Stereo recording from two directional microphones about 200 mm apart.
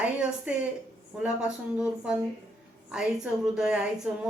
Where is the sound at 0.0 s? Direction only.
5° right (ahead or behind).